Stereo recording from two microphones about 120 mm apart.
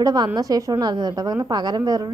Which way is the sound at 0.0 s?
30° right (ahead or behind).